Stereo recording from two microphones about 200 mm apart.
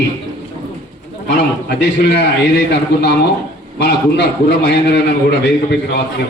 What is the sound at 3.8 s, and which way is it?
A man's voice, 55° left (ahead or behind).